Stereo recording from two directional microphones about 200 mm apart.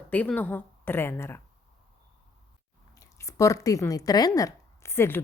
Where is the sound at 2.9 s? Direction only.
15° left (ahead or behind).